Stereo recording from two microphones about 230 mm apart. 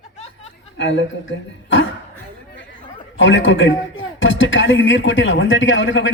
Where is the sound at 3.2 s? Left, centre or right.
Left.